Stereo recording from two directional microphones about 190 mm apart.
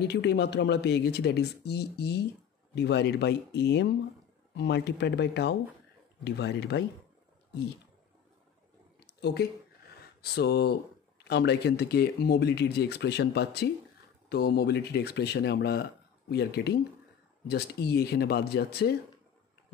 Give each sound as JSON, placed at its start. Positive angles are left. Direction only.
{"t": 0.0, "sound": "speech", "side_deg": 60}
{"t": 9.0, "sound": "a sound", "side_deg": 60}
{"t": 10.2, "sound": "speech", "side_deg": 60}